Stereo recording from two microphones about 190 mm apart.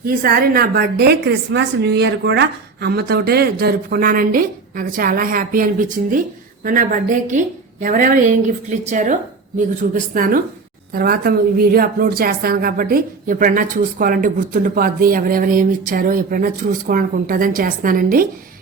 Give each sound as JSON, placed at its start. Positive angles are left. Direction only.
{"t": 0.2, "sound": "a woman's voice", "side_deg": -50}